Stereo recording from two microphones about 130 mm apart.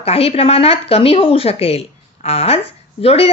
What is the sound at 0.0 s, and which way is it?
A woman's voice, 50° left (ahead or behind).